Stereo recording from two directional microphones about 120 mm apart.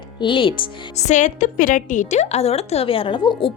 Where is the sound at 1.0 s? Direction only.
80° left.